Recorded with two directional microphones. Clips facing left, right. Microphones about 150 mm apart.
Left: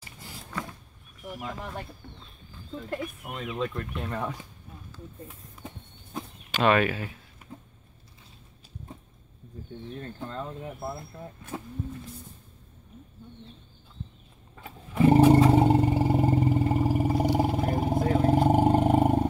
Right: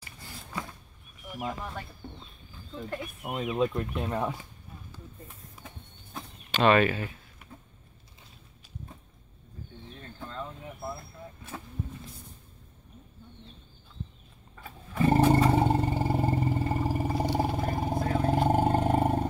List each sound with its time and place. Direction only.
2.0 s speech: 25° right (ahead or behind)
3.3 s speech: 15° right (ahead or behind)
6.1 s a sound: 5° left (ahead or behind)
14.5 s roar: 15° left (ahead or behind)